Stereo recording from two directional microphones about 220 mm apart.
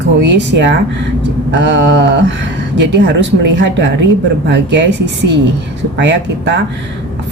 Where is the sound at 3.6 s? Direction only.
55° right (ahead or behind).